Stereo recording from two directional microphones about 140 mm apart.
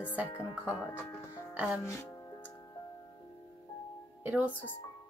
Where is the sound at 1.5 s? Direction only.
10° right (ahead or behind).